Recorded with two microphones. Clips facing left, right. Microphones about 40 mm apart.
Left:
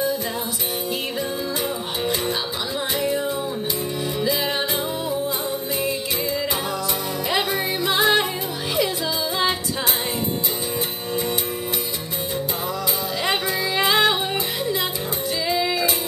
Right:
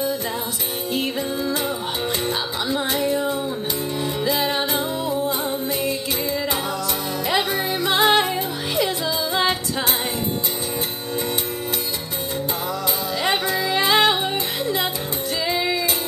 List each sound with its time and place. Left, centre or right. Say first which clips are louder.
4.3 s music: right 3 dB; right
7.2 s music: right 1 dB; right
12.8 s music: right 2 dB; right
15.4 s music: even; right